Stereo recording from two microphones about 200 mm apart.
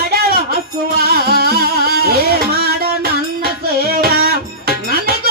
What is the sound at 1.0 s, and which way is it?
Music, 50° right (ahead or behind).